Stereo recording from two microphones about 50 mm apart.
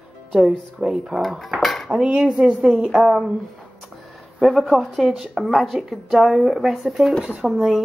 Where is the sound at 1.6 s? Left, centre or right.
Centre.